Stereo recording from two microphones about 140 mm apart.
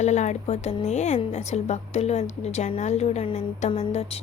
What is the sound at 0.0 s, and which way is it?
A woman's voice, 55° left (ahead or behind).